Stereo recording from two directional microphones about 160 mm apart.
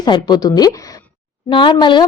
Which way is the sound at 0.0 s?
25° left (ahead or behind).